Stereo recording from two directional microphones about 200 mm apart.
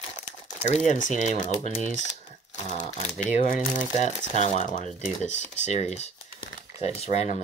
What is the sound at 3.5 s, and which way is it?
Speech, 40° left (ahead or behind).